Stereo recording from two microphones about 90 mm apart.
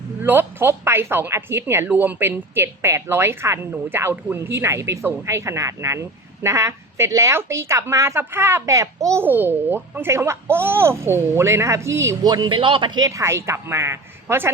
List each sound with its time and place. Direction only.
0.2 s a woman's voice: 25° right (ahead or behind)
9.2 s a woman's voice: 25° right (ahead or behind)
12.2 s speech: 50° right (ahead or behind); by 13.0 s 70° right (ahead or behind)
13.0 s speech: 40° right (ahead or behind)